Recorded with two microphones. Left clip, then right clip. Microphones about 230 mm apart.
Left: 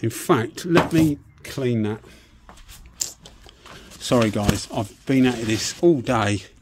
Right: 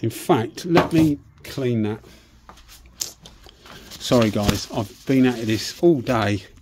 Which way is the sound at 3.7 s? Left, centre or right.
Centre.